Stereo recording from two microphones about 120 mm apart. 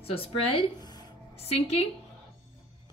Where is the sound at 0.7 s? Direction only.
35° left (ahead or behind).